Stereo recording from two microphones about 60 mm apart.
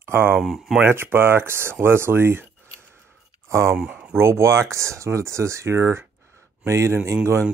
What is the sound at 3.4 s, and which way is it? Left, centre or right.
Speech, right.